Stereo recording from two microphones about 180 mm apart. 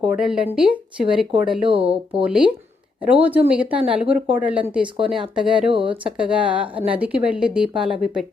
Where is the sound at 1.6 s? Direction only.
30° right (ahead or behind).